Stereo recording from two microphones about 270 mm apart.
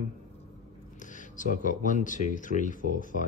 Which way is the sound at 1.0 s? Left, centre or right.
Left.